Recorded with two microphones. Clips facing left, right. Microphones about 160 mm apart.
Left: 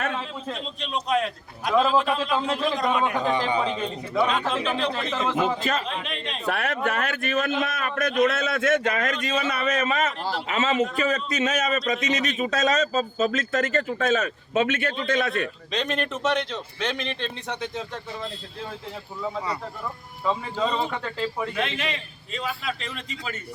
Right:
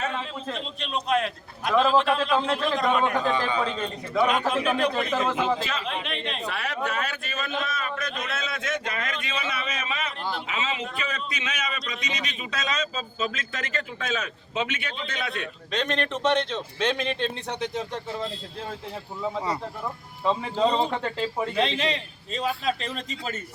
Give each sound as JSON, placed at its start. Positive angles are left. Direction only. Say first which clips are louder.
{"t": 0.4, "sound": "a man's voice", "louder": "even", "side_deg": 0}
{"t": 3.2, "sound": "a man's voice", "louder": "left 2 dB", "side_deg": 15}
{"t": 4.3, "sound": "a man's voice", "louder": "right 1 dB", "side_deg": -10}
{"t": 6.5, "sound": "speech", "louder": "left 7 dB", "side_deg": 55}
{"t": 15.7, "sound": "a man's voice", "louder": "right 2 dB", "side_deg": 0}
{"t": 16.5, "sound": "speech", "louder": "right 3 dB", "side_deg": -25}
{"t": 20.6, "sound": "a man's voice", "louder": "right 3 dB", "side_deg": -35}